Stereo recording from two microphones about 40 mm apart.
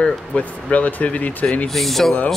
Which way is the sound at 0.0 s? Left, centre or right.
Left.